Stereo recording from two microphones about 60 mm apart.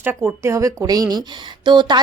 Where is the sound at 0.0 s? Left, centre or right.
Right.